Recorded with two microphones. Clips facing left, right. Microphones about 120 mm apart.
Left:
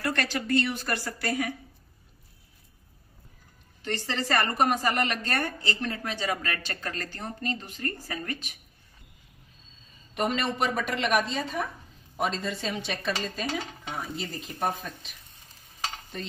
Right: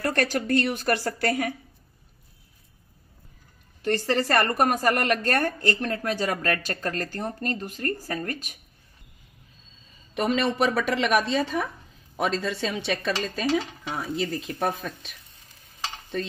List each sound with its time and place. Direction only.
0.0 s a woman's voice: 45° right (ahead or behind)
3.8 s a woman's voice: 45° right (ahead or behind)
10.3 s a woman's voice: 90° right; by 15.1 s 70° right (ahead or behind)